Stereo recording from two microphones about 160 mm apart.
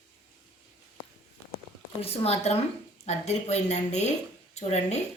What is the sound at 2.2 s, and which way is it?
A woman's voice, 40° left (ahead or behind).